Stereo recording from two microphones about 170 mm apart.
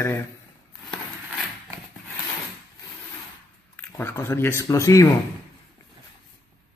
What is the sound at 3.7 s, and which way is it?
Speech, 10° left (ahead or behind).